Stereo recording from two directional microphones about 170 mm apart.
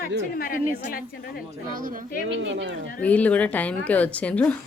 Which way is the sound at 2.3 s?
90° right.